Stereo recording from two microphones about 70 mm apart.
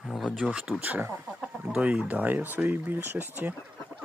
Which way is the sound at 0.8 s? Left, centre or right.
Right.